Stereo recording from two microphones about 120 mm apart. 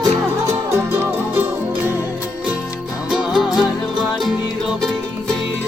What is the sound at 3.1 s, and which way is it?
Music, 5° right (ahead or behind).